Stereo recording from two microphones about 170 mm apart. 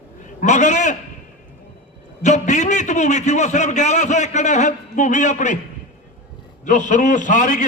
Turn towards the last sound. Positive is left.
turn(degrees=50)  # may be behind; listen again after turning